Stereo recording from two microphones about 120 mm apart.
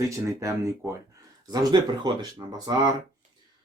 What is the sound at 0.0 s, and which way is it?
Speech, 25° right (ahead or behind).